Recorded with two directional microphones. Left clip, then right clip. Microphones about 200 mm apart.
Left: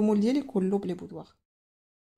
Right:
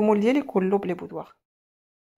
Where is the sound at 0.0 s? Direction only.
10° right (ahead or behind).